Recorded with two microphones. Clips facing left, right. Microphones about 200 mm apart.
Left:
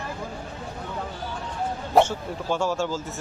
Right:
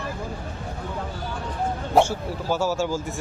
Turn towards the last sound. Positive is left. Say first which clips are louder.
# right 2 dB
turn(degrees=-10)  # may be behind; listen again after turning